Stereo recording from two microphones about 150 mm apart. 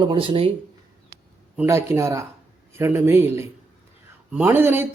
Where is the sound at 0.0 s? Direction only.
35° right (ahead or behind).